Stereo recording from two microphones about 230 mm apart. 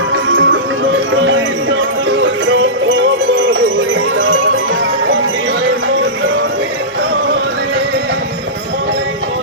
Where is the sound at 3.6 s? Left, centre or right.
Right.